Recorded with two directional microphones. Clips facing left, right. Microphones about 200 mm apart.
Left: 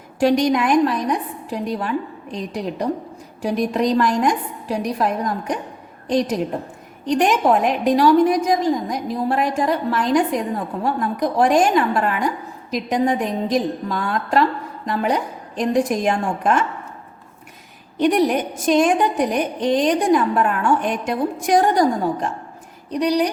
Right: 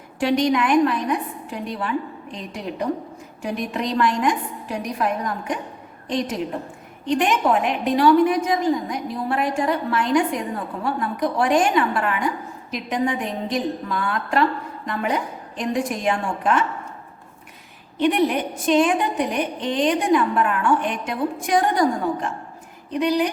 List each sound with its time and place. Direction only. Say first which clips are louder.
0.2 s a woman's voice: left 3 dB; 40° left (ahead or behind)
17.9 s a woman's voice: left 2 dB; 40° left (ahead or behind)